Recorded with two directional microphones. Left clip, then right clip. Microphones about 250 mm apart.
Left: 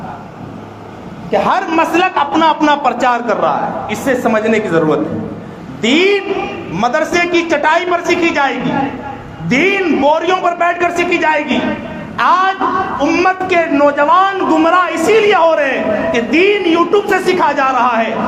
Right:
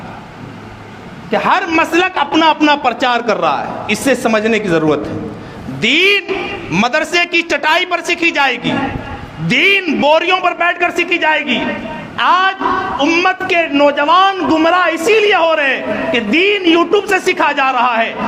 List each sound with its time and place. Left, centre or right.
1.3 s a man's voice: right
12.1 s a sound: right
13.0 s a man's voice: right